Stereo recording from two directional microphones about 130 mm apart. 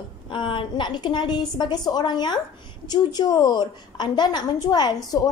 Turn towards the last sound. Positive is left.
turn(degrees=30)  # may be behind; listen again after turning